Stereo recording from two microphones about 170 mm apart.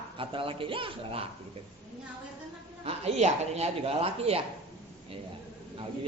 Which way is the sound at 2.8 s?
40° right (ahead or behind).